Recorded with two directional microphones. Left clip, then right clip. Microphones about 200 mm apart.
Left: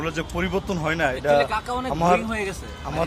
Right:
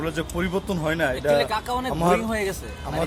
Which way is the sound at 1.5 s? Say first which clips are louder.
Even; 60° right (ahead or behind).